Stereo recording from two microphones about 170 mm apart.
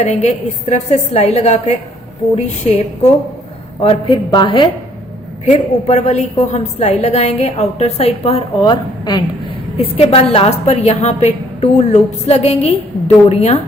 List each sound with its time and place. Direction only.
0.2 s a woman's voice: 40° left (ahead or behind)
5.5 s a woman's voice: 45° left (ahead or behind)